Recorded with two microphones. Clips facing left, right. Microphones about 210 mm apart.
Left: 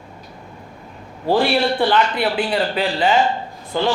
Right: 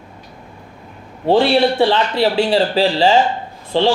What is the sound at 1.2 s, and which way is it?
A man's voice, 25° right (ahead or behind).